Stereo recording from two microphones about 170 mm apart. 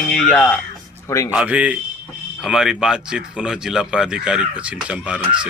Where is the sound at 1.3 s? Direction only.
5° right (ahead or behind).